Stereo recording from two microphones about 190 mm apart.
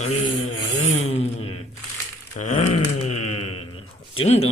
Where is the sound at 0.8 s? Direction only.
35° left (ahead or behind).